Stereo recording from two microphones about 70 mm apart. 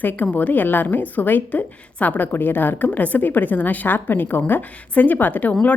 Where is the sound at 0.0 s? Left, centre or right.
Left.